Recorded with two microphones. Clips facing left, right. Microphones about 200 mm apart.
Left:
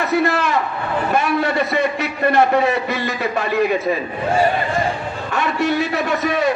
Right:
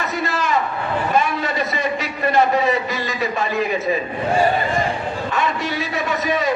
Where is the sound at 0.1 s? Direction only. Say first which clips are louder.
Left 5 dB; 60° left (ahead or behind).